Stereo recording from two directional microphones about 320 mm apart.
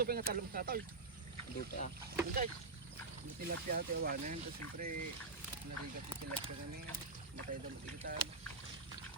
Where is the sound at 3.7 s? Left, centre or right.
Right.